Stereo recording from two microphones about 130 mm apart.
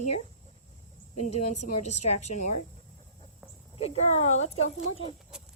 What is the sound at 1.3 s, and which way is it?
A woman's voice, 60° left (ahead or behind).